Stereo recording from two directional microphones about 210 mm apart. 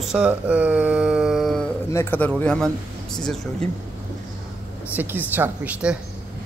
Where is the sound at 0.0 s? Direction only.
5° right (ahead or behind).